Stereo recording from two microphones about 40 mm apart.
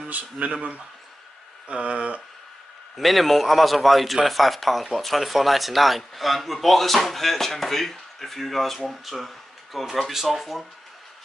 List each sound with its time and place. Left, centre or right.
0.6 s speech: right
1.7 s a sound: right
3.0 s speech: centre